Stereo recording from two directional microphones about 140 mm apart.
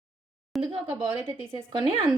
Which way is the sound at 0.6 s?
40° right (ahead or behind).